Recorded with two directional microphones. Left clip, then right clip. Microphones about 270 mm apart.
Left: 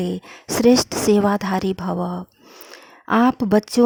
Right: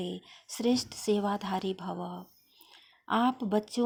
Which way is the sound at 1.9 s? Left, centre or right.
Left.